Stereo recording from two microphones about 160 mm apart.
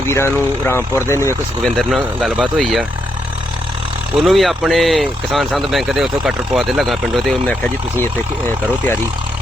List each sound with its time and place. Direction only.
0.1 s speech: 15° left (ahead or behind)
1.6 s speech: centre (ahead or behind)
4.1 s speech: centre (ahead or behind)
7.4 s speech: 10° left (ahead or behind)